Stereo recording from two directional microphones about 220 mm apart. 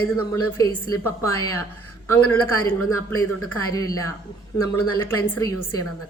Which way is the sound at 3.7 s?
15° left (ahead or behind).